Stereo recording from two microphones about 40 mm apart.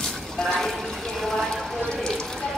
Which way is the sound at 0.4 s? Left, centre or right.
Centre.